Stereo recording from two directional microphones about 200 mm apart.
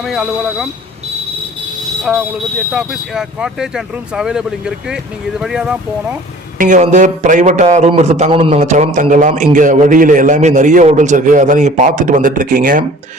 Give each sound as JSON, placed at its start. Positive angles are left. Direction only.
{"t": 0.0, "sound": "speech", "side_deg": 0}
{"t": 2.1, "sound": "speech", "side_deg": 0}
{"t": 6.6, "sound": "a man's voice", "side_deg": -35}